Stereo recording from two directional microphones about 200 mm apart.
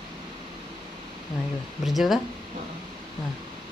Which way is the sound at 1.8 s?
Centre (ahead or behind).